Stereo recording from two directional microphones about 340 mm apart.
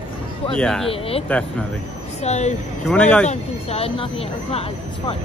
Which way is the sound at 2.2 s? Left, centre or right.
Centre.